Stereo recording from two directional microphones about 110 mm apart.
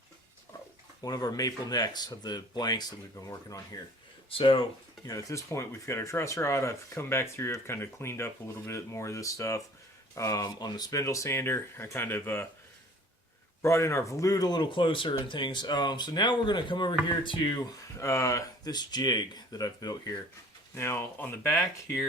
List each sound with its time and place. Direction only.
1.0 s speech: 35° left (ahead or behind)
4.3 s speech: 55° left (ahead or behind)
5.0 s speech: 30° left (ahead or behind)
13.6 s speech: 25° left (ahead or behind)
20.7 s speech: 20° left (ahead or behind)